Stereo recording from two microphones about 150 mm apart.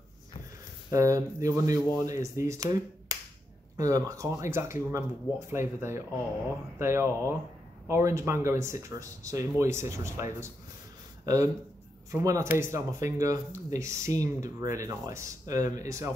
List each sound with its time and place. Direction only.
0.9 s speech: 20° right (ahead or behind)
11.2 s speech: 20° right (ahead or behind)